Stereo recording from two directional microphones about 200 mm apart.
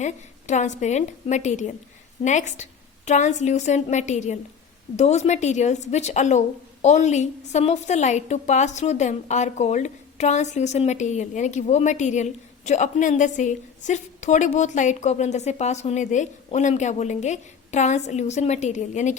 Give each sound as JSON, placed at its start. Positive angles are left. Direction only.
{"t": 0.0, "sound": "a woman's voice", "side_deg": 35}